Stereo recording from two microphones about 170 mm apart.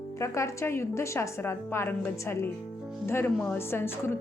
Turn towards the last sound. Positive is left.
turn(degrees=15)  # may be behind; listen again after turning